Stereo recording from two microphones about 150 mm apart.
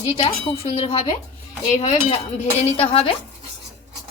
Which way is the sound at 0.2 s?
40° left (ahead or behind).